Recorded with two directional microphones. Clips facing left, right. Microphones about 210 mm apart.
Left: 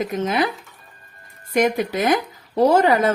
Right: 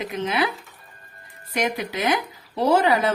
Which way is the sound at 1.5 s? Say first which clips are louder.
Left 6 dB; 45° left (ahead or behind).